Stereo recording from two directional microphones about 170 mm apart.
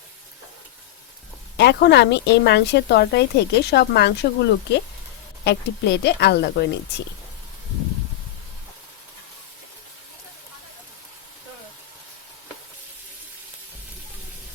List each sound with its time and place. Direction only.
1.5 s speech: 80° left
5.5 s speech: 80° left